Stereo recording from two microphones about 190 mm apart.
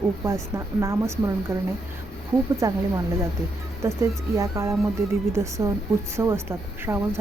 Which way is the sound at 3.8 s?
15° right (ahead or behind).